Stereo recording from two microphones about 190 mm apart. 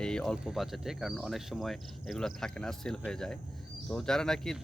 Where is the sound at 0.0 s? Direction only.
5° left (ahead or behind).